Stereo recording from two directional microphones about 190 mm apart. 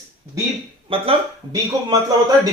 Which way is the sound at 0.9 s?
30° right (ahead or behind).